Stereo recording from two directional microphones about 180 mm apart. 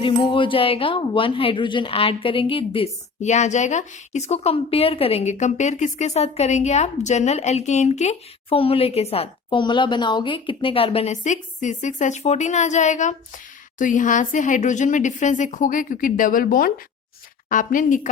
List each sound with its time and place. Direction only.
0.0 s a woman's voice: 25° left (ahead or behind); by 18.1 s 45° left (ahead or behind)